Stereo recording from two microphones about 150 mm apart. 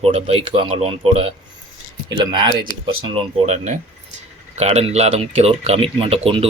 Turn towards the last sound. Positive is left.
turn(degrees=-40)  # may be behind; listen again after turning